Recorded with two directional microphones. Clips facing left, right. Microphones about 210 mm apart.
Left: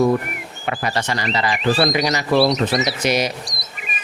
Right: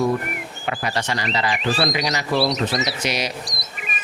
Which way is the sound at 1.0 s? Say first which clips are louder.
Left 2 dB; 35° left (ahead or behind).